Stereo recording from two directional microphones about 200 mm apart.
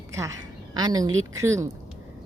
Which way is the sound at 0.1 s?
15° right (ahead or behind).